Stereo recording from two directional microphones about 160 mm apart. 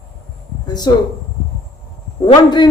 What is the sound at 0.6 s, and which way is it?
Speech, 25° left (ahead or behind).